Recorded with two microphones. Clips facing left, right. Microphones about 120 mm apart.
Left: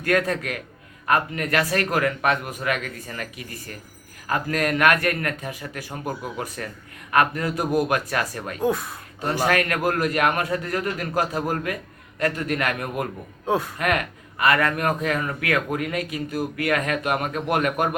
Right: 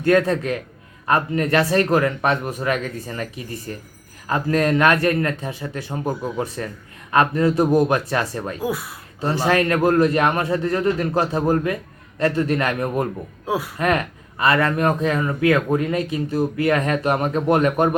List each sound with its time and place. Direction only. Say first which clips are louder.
0.0 s speech: right 5 dB; 25° right (ahead or behind)
8.6 s speech: left 4 dB; 5° right (ahead or behind)
9.5 s speech: right 7 dB; 30° right (ahead or behind)
13.4 s speech: left 1 dB; 5° right (ahead or behind)
13.7 s speech: right 3 dB; 30° right (ahead or behind)